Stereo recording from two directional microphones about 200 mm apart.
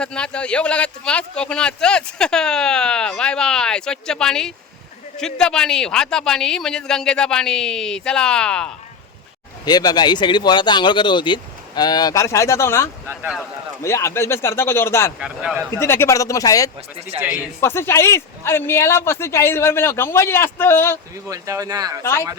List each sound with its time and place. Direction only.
0.0 s a man's voice: 5° left (ahead or behind)
9.6 s speech: 20° left (ahead or behind)
13.1 s a man's voice: 5° right (ahead or behind)
13.8 s speech: 15° left (ahead or behind)
15.2 s a man's voice: 5° right (ahead or behind)
15.7 s speech: 10° left (ahead or behind)
17.2 s speech: 5° right (ahead or behind)
17.6 s speech: 15° left (ahead or behind)
21.2 s speech: 15° right (ahead or behind)